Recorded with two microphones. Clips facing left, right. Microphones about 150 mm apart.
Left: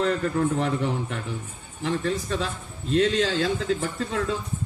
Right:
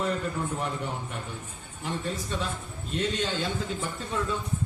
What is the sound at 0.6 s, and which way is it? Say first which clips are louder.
Speech: left 7 dB; 80° left.